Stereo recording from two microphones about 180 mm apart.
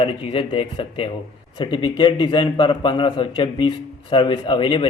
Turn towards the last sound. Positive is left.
turn(degrees=25)  # may be behind; listen again after turning